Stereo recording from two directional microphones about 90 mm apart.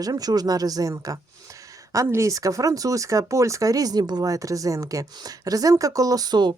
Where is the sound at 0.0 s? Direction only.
45° right (ahead or behind).